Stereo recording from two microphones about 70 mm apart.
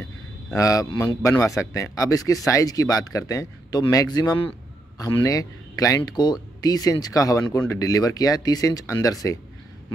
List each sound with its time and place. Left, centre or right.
0.6 s speech: left
0.9 s speech: left
3.7 s speech: left